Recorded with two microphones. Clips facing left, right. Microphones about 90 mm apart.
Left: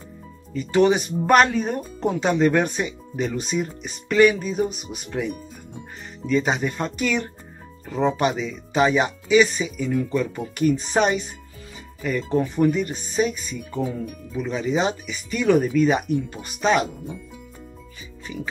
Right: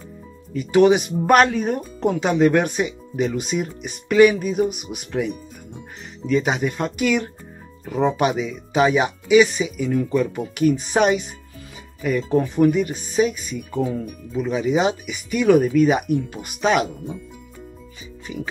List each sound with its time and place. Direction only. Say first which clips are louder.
0.6 s speech: right 3 dB; 10° right (ahead or behind)